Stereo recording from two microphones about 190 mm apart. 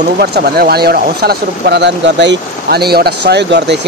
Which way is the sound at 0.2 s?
55° right (ahead or behind).